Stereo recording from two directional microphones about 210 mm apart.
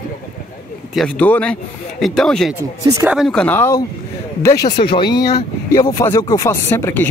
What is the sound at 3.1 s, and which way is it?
Speech, centre (ahead or behind).